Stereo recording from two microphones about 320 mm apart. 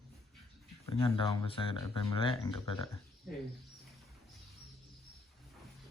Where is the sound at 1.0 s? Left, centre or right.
Centre.